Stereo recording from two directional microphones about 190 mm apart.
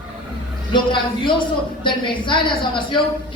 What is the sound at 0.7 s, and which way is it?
A woman's voice, 25° left (ahead or behind).